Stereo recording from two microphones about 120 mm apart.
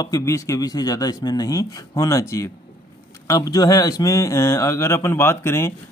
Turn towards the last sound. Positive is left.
turn(degrees=20)  # may be behind; listen again after turning